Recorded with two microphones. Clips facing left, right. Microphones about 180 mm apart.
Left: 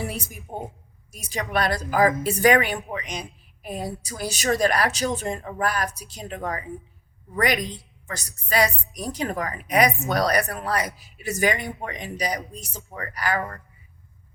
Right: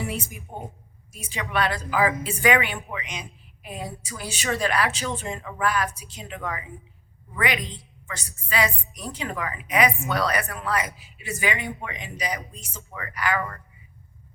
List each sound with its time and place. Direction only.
0.0 s a sound: 35° left (ahead or behind)
1.1 s speech: 40° left (ahead or behind)
7.6 s a woman's voice: 10° left (ahead or behind)
8.0 s speech: 40° left (ahead or behind)